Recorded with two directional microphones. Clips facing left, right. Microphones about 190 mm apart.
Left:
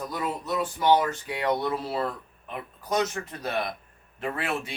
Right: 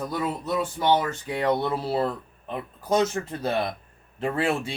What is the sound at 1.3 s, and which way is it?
Speech, 30° right (ahead or behind).